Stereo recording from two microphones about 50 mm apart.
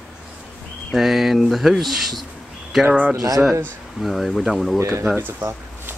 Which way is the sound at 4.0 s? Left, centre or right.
Centre.